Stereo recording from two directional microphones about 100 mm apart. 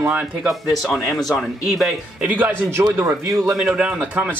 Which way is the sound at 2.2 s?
15° right (ahead or behind).